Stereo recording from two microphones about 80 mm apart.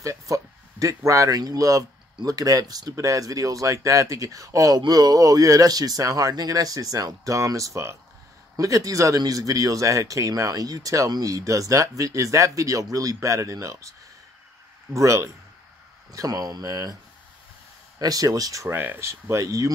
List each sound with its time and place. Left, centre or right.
0.0 s speech: right
15.0 s speech: right
16.1 s speech: right
17.9 s speech: right
18.7 s speech: right
18.9 s speech: right